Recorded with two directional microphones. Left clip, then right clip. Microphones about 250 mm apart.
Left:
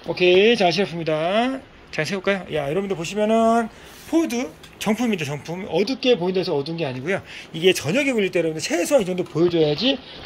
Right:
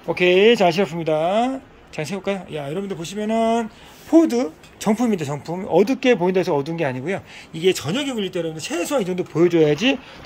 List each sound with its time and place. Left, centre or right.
0.4 s speech: right
1.0 s speech: centre
4.1 s speech: centre
5.9 s speech: right
7.1 s speech: centre
9.6 s speech: right